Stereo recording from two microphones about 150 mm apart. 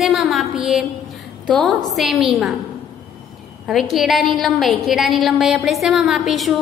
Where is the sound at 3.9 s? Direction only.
Centre (ahead or behind).